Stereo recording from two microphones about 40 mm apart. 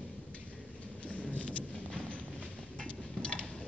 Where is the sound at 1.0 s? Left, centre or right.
Left.